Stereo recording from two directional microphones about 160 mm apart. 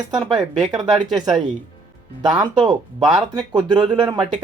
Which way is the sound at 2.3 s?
25° right (ahead or behind).